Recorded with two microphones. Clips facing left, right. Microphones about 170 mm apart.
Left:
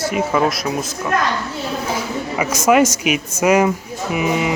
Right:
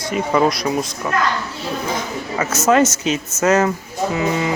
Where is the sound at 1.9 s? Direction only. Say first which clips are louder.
Left 1 dB; 10° left (ahead or behind).